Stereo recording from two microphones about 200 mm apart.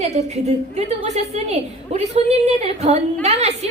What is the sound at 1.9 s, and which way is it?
A woman's voice, 35° right (ahead or behind).